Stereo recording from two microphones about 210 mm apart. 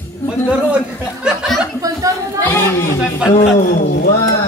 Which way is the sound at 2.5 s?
10° left (ahead or behind).